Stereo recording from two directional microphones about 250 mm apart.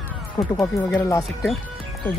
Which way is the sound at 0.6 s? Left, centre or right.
Centre.